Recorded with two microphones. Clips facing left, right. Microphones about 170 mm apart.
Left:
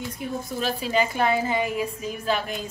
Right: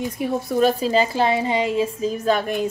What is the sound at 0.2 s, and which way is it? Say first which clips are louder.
Speech: right 8 dB; 75° right (ahead or behind).